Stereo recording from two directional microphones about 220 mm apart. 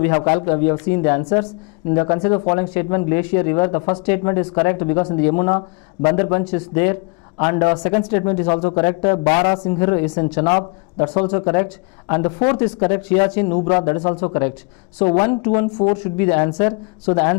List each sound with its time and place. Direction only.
0.0 s a woman's voice: 15° left (ahead or behind)
10.4 s speech: 25° left (ahead or behind)
11.3 s a woman's voice: 15° left (ahead or behind)
13.1 s a woman's voice: 10° left (ahead or behind)
15.0 s a woman's voice: 10° left (ahead or behind)